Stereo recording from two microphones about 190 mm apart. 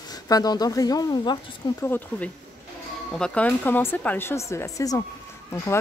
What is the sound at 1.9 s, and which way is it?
Speech, 10° left (ahead or behind).